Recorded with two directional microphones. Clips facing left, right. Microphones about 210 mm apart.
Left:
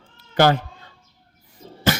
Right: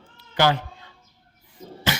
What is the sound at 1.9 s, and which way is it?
Beatboxing, 45° left (ahead or behind).